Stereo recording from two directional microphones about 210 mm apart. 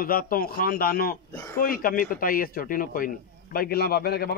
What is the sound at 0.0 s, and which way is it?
Speech, 45° left (ahead or behind).